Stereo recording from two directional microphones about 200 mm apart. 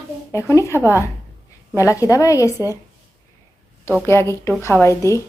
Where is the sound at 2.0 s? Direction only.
15° left (ahead or behind).